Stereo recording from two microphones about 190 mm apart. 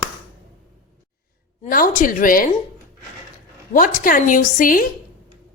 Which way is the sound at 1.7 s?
45° left (ahead or behind).